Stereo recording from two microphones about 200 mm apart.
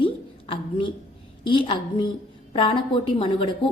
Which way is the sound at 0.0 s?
25° left (ahead or behind).